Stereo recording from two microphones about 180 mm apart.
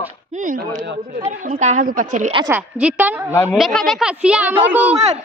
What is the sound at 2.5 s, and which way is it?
A woman's voice, 10° right (ahead or behind).